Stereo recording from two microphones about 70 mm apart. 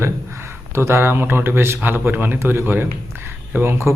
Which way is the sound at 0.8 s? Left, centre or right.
Right.